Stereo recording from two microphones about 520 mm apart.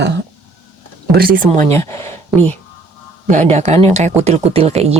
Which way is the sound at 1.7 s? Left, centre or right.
Centre.